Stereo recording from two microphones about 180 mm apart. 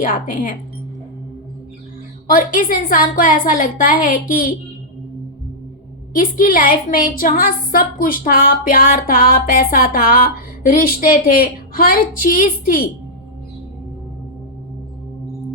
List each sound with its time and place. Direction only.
0.0 s speech: 50° left (ahead or behind)
2.3 s speech: 50° left (ahead or behind)
6.1 s speech: 50° left (ahead or behind)